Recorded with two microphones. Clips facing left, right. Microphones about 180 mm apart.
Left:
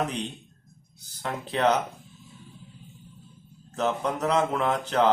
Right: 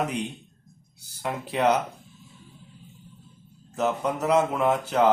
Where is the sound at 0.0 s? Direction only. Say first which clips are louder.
Right 1 dB; 10° right (ahead or behind).